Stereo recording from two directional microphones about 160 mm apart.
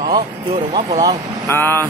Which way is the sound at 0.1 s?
35° right (ahead or behind).